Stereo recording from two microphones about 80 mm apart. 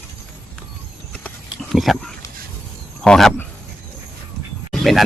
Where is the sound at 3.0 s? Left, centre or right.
Centre.